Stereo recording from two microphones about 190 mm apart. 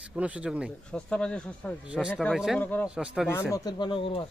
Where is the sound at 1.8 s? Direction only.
5° right (ahead or behind).